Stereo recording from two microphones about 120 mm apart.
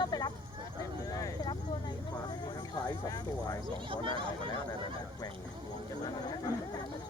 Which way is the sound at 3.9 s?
45° right (ahead or behind).